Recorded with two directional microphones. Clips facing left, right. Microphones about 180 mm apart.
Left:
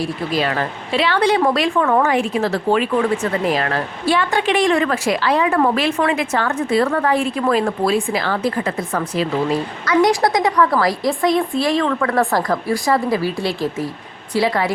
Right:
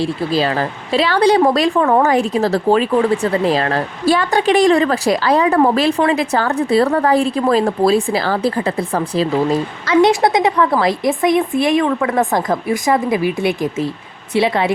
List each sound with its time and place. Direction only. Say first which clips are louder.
0.0 s speech: right 3 dB; 30° right (ahead or behind)